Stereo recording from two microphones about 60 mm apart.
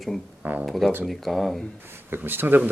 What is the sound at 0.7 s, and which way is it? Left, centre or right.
Speech, centre.